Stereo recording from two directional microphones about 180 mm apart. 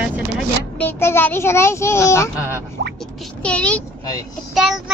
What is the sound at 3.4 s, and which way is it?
Speech, 5° left (ahead or behind).